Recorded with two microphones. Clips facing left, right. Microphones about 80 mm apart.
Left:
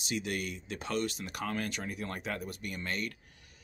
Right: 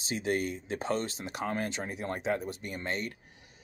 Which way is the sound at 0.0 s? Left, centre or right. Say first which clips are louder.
Right 4 dB; right.